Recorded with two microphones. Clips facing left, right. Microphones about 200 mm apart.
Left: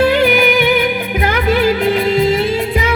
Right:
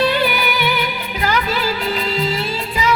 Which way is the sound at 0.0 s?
50° left (ahead or behind).